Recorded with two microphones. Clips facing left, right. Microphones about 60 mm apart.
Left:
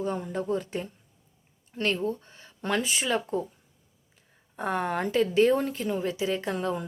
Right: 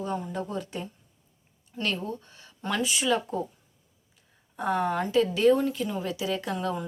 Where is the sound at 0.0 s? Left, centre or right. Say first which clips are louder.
Left 1 dB; left.